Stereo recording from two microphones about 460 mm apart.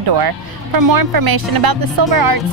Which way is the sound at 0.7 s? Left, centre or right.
Right.